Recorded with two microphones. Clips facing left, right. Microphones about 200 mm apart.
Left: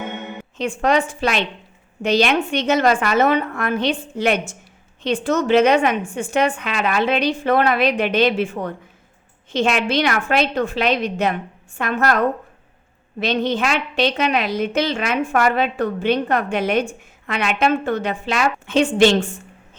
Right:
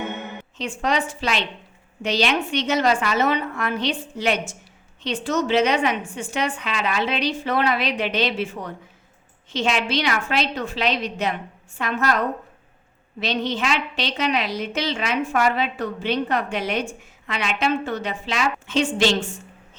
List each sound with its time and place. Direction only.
0.5 s a woman's voice: 55° left (ahead or behind)